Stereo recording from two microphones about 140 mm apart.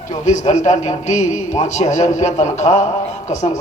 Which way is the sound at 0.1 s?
60° left (ahead or behind).